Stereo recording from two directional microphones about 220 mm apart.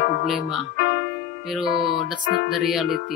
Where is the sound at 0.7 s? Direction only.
45° left (ahead or behind).